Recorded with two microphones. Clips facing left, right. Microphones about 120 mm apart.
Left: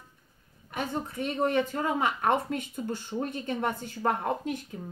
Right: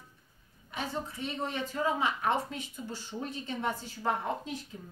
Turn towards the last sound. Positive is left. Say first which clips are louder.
# left 4 dB
turn(degrees=55)  # may be behind; listen again after turning